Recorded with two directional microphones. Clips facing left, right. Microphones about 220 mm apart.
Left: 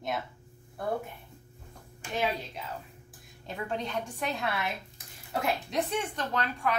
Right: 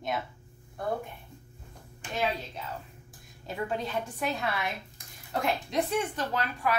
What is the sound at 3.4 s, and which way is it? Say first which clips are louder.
A woman's voice: right 2 dB; 5° right (ahead or behind).